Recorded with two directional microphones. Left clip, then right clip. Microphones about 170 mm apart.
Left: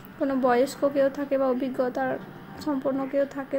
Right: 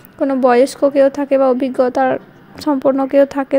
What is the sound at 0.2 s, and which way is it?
A woman's voice, 45° right (ahead or behind).